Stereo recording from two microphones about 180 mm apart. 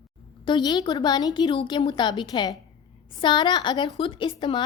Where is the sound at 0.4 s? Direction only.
25° left (ahead or behind).